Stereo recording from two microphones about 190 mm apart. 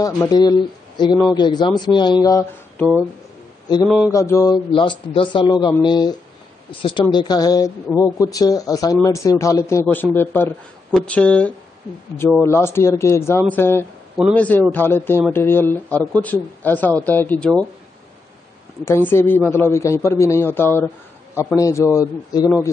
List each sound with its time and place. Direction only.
0.0 s speech: 20° left (ahead or behind)
4.1 s speech: 15° left (ahead or behind)
19.0 s speech: 10° left (ahead or behind)